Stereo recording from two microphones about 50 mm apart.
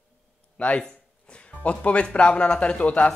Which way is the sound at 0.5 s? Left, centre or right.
Left.